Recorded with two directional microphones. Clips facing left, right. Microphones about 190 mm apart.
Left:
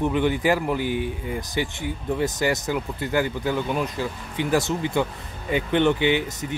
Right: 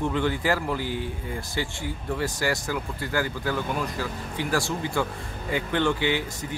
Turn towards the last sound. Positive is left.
turn(degrees=20)  # may be behind; listen again after turning